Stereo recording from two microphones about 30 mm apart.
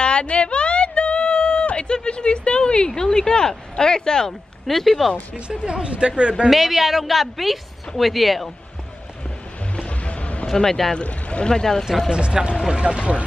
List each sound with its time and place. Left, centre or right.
0.0 s a sound: left
2.0 s a woman's voice: left
2.9 s speech: left
4.6 s a woman's voice: centre
5.7 s speech: right
6.5 s a woman's voice: centre
9.8 s music: left
10.4 s a man's voice: centre
11.0 s a woman's voice: left
11.4 s speech: left
12.1 s speech: right